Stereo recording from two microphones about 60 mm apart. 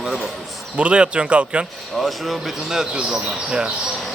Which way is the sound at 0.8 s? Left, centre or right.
Centre.